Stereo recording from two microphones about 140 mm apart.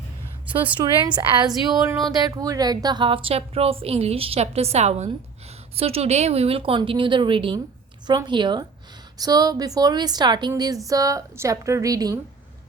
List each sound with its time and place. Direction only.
0.8 s a woman's voice: 35° right (ahead or behind)